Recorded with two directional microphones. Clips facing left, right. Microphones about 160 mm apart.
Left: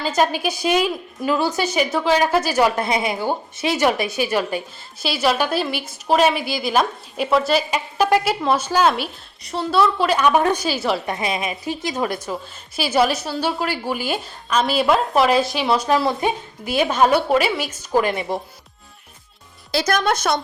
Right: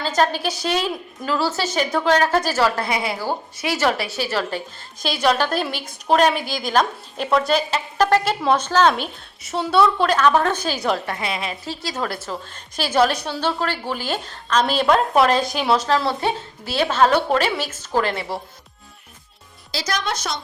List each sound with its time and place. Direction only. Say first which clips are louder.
0.0 s a woman's voice: left 1 dB; 10° left (ahead or behind)
11.0 s a woman's voice: left 3 dB; 20° left (ahead or behind); by 15.8 s centre (ahead or behind)
15.8 s a woman's voice: left 2 dB; 15° left (ahead or behind)
19.7 s a woman's voice: left 6 dB; 55° left (ahead or behind)